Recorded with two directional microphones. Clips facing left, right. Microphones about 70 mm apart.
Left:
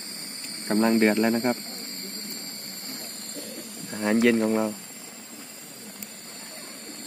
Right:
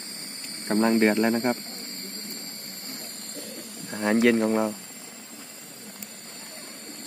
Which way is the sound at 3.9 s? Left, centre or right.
Right.